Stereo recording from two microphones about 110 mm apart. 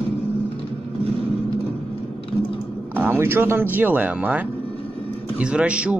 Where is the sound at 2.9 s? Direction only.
20° right (ahead or behind).